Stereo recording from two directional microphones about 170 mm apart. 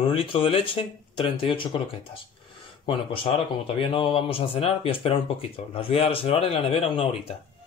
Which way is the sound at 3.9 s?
30° left (ahead or behind).